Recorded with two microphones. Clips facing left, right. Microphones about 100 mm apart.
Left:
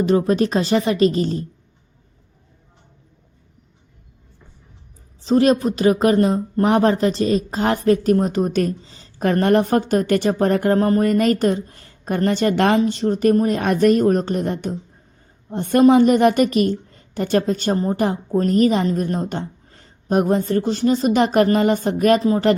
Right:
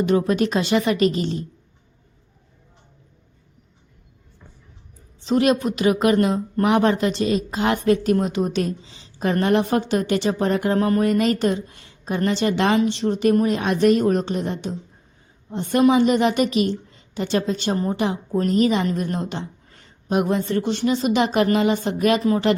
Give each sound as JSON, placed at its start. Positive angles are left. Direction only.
{"t": 0.0, "sound": "speech", "side_deg": 35}
{"t": 5.2, "sound": "speech", "side_deg": 35}